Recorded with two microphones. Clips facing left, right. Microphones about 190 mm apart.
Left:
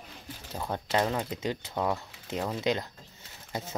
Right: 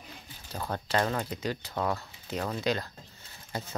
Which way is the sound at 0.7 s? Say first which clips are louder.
Left 1 dB; 15° left (ahead or behind).